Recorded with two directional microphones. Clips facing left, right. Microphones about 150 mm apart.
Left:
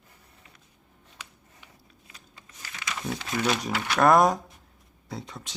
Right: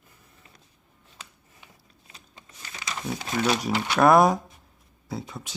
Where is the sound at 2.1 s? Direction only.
20° right (ahead or behind).